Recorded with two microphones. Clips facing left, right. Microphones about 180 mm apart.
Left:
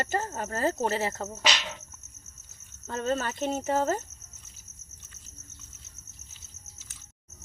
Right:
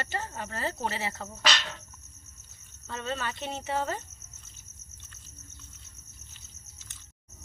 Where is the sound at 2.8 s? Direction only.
45° left (ahead or behind).